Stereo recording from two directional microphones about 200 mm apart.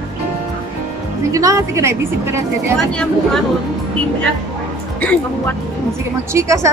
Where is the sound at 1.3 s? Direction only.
15° right (ahead or behind).